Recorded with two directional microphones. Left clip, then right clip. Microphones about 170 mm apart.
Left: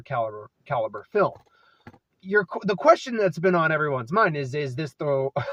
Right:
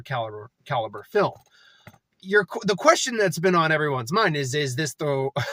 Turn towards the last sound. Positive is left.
turn(degrees=-25)  # may be behind; listen again after turning